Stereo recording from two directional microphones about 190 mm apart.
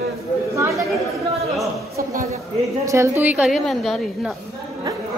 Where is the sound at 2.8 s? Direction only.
15° right (ahead or behind); by 4.4 s centre (ahead or behind).